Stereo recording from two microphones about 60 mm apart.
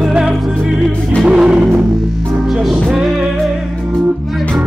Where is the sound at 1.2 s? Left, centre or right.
Centre.